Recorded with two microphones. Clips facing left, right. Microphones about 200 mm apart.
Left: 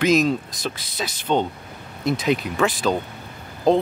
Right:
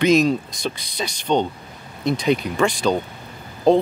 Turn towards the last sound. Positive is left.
turn(degrees=0)  # may be behind; listen again after turning